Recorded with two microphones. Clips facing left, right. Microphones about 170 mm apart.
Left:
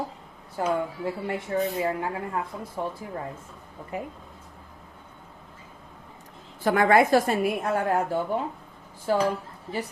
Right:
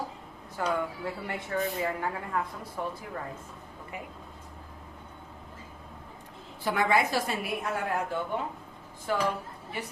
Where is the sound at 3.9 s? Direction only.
40° left (ahead or behind).